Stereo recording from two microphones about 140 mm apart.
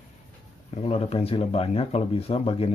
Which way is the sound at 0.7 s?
45° left (ahead or behind).